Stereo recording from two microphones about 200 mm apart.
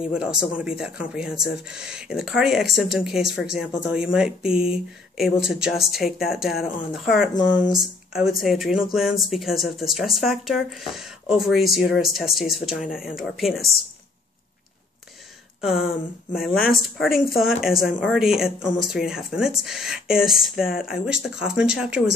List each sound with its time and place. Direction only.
0.0 s speech: 5° right (ahead or behind)
15.6 s speech: centre (ahead or behind)